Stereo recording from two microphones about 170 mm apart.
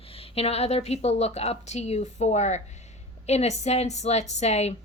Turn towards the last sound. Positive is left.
turn(degrees=40)  # may be behind; listen again after turning